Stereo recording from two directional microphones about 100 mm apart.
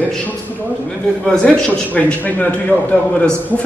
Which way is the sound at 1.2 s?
5° left (ahead or behind).